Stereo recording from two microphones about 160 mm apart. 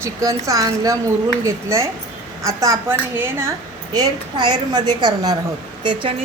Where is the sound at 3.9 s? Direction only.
25° right (ahead or behind).